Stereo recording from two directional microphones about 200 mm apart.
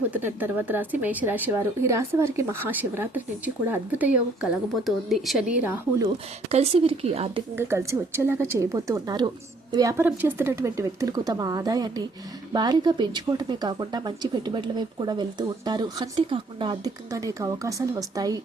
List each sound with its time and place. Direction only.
0.1 s speech: 10° right (ahead or behind)
6.5 s speech: 30° right (ahead or behind)
7.5 s speech: 10° right (ahead or behind)